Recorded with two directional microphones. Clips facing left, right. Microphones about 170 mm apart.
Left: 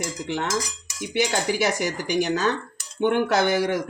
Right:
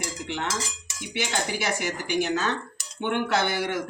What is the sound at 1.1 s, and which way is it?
Speech, 40° left (ahead or behind).